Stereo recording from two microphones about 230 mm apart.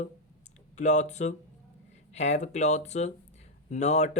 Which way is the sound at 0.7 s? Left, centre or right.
Left.